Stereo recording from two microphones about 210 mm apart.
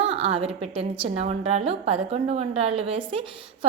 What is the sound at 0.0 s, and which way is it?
A woman's voice, 25° right (ahead or behind).